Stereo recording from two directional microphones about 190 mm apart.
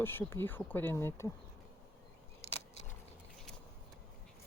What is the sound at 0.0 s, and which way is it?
Speech, 10° left (ahead or behind).